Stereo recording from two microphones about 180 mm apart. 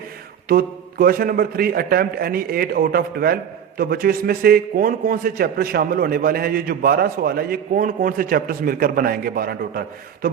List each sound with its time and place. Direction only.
0.4 s a man's voice: 55° right (ahead or behind)